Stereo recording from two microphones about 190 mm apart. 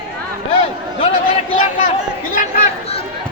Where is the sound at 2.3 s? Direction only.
40° left (ahead or behind).